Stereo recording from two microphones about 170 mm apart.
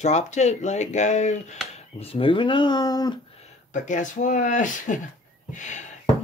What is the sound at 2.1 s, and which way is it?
Speech, 30° left (ahead or behind).